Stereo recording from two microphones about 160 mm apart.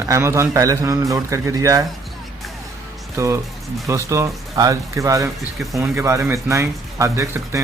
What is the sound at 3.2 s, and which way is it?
Speech, 20° right (ahead or behind).